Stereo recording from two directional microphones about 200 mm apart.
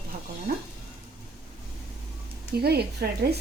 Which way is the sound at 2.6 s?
50° right (ahead or behind).